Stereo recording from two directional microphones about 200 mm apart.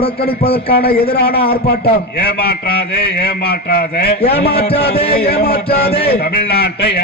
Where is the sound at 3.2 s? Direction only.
55° left (ahead or behind).